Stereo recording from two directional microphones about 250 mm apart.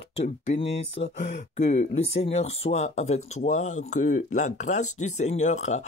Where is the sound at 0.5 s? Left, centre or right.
Left.